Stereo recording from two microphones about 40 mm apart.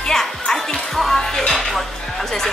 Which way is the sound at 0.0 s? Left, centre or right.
Centre.